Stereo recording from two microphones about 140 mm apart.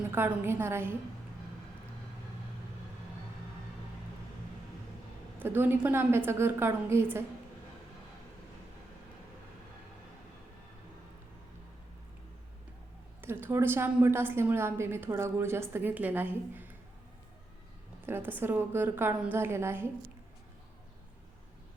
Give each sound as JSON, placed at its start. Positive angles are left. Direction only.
{"t": 0.1, "sound": "a woman's voice", "side_deg": -15}
{"t": 5.4, "sound": "a woman's voice", "side_deg": -15}
{"t": 13.2, "sound": "a woman's voice", "side_deg": -15}
{"t": 18.0, "sound": "a woman's voice", "side_deg": -15}